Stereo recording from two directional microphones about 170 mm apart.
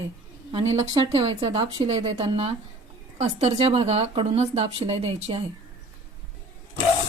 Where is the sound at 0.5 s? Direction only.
35° right (ahead or behind).